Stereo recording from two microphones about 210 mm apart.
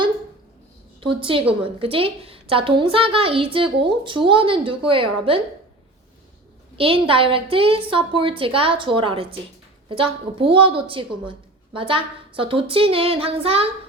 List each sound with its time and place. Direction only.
1.0 s a woman's voice: 25° right (ahead or behind)
6.7 s a woman's voice: 25° right (ahead or behind)